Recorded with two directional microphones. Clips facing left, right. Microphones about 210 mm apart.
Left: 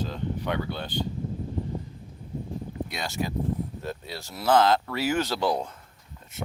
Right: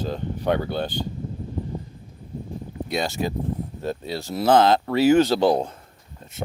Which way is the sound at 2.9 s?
30° right (ahead or behind).